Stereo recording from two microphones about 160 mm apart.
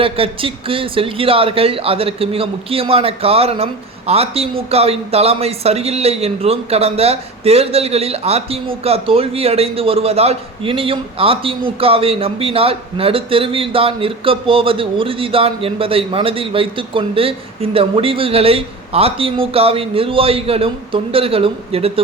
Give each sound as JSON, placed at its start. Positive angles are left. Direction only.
{"t": 0.0, "sound": "a man's voice", "side_deg": -35}